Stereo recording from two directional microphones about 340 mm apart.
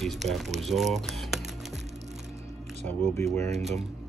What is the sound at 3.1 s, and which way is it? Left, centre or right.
Speech, centre.